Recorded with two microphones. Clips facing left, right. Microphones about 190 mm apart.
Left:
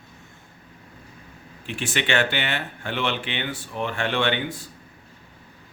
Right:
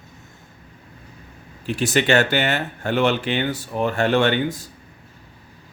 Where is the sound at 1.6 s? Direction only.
40° right (ahead or behind).